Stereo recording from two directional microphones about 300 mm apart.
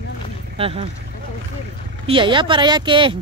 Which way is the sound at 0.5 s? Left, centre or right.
Centre.